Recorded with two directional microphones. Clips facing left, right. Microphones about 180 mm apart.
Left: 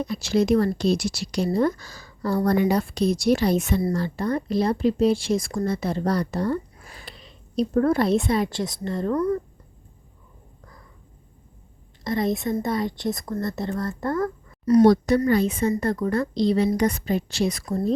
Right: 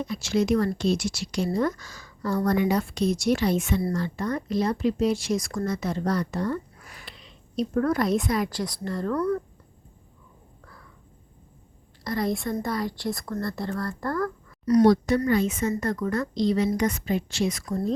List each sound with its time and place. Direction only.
0.0 s speech: 35° left (ahead or behind)
12.0 s speech: 25° left (ahead or behind)